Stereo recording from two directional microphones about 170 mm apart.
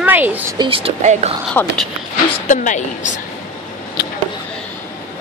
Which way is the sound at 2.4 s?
45° left (ahead or behind).